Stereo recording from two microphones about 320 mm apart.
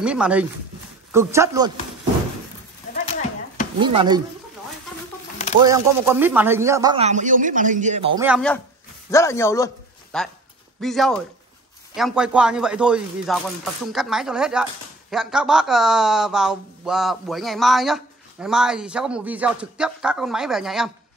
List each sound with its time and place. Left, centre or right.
0.0 s speech: centre
2.9 s a sound: left
3.8 s speech: centre
5.6 s speech: centre
8.3 s speech: centre